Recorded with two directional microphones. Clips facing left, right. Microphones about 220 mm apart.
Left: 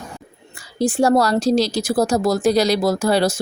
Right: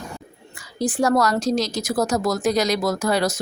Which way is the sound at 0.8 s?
25° left (ahead or behind).